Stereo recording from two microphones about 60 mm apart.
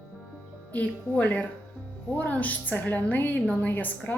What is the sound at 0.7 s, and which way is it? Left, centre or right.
Music, left.